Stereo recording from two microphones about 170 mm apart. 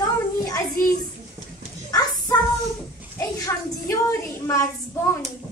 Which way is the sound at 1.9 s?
20° left (ahead or behind).